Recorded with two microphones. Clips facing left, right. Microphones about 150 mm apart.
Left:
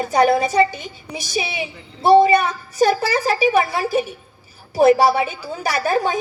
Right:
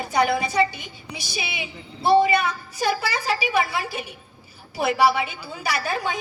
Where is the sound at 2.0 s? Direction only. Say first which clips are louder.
Left 5 dB; 40° left (ahead or behind).